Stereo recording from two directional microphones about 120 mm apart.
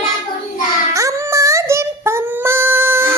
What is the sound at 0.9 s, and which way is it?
Child singing, 25° right (ahead or behind).